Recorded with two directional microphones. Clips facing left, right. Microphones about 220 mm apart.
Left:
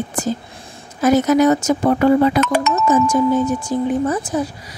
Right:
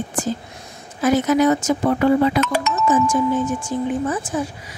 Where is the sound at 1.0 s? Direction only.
40° left (ahead or behind).